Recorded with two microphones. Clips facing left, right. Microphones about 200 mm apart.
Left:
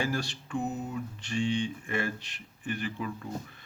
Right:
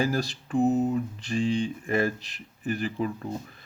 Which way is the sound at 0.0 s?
35° right (ahead or behind).